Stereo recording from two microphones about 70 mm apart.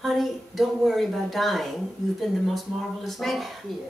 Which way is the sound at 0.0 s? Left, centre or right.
Centre.